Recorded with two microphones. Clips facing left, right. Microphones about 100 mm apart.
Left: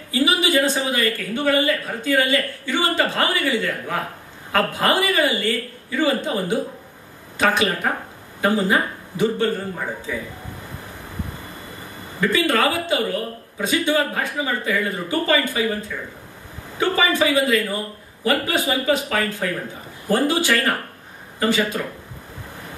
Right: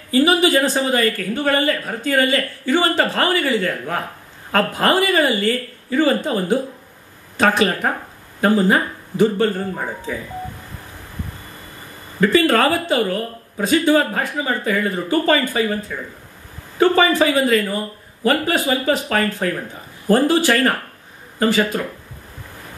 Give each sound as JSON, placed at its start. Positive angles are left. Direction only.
{"t": 0.1, "sound": "speech", "side_deg": -45}
{"t": 12.2, "sound": "speech", "side_deg": -40}